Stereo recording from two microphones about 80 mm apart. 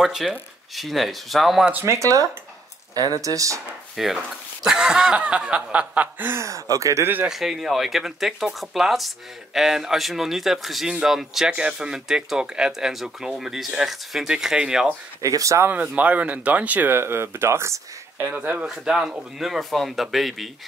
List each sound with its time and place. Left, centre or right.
0.0 s speech: centre
1.9 s speech: right
3.9 s speech: centre
4.6 s chuckle: centre; by 6.4 s right
6.4 s speech: right
7.2 s speech: centre
15.2 s speech: right
15.7 s speech: centre; by 17.7 s right
18.2 s speech: centre
18.7 s speech: centre